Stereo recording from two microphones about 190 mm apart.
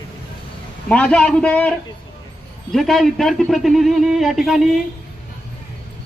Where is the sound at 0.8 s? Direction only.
5° left (ahead or behind).